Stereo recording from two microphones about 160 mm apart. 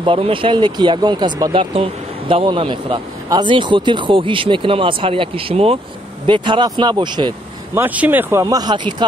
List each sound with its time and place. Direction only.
0.0 s speech: 35° right (ahead or behind)
7.7 s speech: 10° right (ahead or behind); by 8.9 s 30° right (ahead or behind)